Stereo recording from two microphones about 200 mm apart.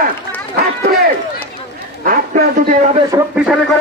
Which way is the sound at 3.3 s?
5° right (ahead or behind).